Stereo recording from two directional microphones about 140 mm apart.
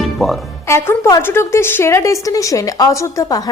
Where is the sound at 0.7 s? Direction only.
20° left (ahead or behind).